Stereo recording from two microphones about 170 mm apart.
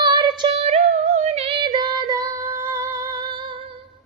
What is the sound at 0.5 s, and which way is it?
Music, 40° right (ahead or behind).